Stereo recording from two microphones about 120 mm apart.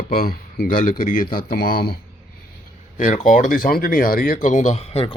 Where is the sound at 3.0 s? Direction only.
90° left; by 5.1 s 55° left (ahead or behind).